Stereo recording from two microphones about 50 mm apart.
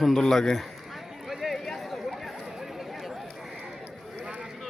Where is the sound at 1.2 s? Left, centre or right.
Centre.